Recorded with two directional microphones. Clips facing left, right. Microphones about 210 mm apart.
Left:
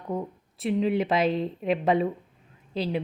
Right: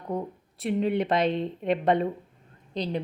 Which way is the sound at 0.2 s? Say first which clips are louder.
Left 1 dB; centre (ahead or behind).